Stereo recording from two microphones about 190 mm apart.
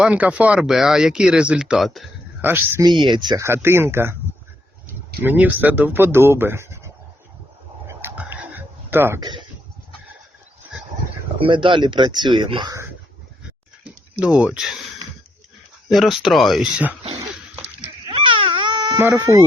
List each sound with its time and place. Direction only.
0.0 s speech: 5° right (ahead or behind)
2.4 s speech: 10° right (ahead or behind)
3.0 s speech: 25° right (ahead or behind)
7.9 s whispering: 10° right (ahead or behind)
11.3 s speech: 25° right (ahead or behind)
13.8 s speech: 5° right (ahead or behind)
15.9 s speech: centre (ahead or behind)
17.0 s dog: 30° right (ahead or behind)
18.1 s cat: 25° right (ahead or behind)
18.9 s speech: 10° right (ahead or behind)